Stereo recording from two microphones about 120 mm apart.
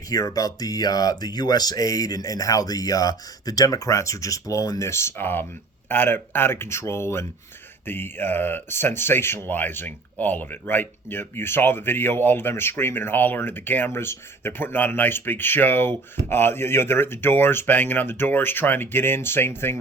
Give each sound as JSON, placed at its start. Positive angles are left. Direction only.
{"t": 0.1, "sound": "speech", "side_deg": 30}